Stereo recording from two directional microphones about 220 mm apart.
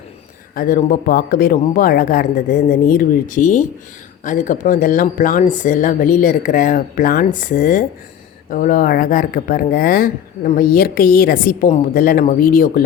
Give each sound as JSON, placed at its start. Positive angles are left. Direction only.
{"t": 0.5, "sound": "speech", "side_deg": 40}